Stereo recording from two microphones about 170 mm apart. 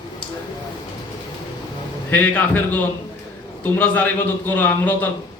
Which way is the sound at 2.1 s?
10° left (ahead or behind).